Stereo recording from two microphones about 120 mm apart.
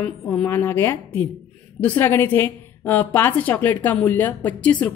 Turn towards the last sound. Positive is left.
turn(degrees=15)  # may be behind; listen again after turning